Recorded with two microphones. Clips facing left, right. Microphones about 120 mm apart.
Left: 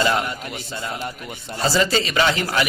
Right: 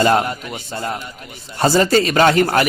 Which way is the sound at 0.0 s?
45° right (ahead or behind).